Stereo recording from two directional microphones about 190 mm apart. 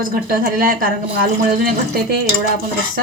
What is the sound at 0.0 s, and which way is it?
Speech, 50° right (ahead or behind).